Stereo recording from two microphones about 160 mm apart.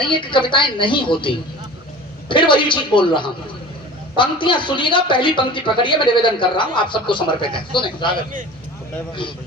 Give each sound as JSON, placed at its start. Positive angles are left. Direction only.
{"t": 0.0, "sound": "speech", "side_deg": 30}